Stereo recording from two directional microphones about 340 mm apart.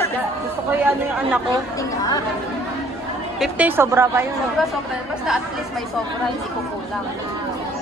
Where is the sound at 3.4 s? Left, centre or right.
Centre.